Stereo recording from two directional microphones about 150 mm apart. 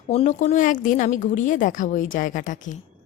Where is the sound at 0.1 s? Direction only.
50° left (ahead or behind).